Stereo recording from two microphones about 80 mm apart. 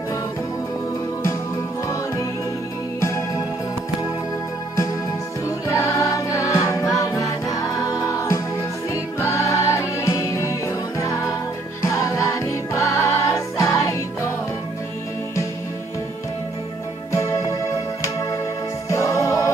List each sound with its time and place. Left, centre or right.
3.0 s music: left
5.7 s music: left
17.1 s music: left
18.9 s music: left